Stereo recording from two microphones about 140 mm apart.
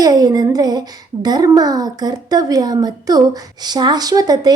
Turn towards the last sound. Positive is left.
turn(degrees=-25)  # may be behind; listen again after turning